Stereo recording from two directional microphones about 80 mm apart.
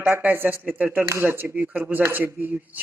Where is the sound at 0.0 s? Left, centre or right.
Centre.